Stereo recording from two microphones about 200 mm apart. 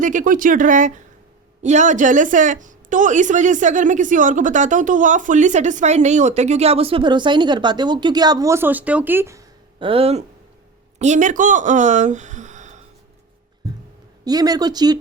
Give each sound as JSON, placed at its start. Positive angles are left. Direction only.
{"t": 0.0, "sound": "a woman's voice", "side_deg": -40}
{"t": 9.8, "sound": "speech", "side_deg": -30}
{"t": 14.3, "sound": "speech", "side_deg": -20}